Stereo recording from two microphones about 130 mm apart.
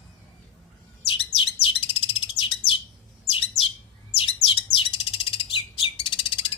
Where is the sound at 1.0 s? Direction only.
45° left (ahead or behind).